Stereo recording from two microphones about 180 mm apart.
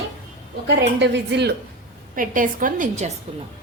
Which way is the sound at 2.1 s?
50° right (ahead or behind).